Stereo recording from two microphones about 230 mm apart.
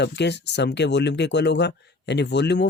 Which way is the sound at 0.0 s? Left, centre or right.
Left.